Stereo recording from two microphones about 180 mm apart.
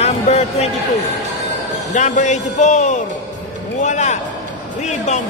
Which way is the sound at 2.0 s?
45° left (ahead or behind).